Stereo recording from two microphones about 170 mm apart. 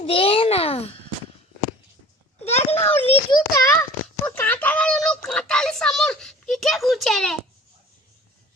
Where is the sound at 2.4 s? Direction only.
40° left (ahead or behind).